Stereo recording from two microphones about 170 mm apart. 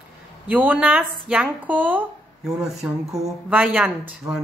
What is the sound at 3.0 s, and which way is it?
Speech, 20° right (ahead or behind).